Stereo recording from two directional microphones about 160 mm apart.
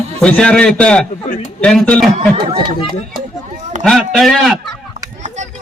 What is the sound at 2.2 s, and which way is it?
Speech, 35° right (ahead or behind).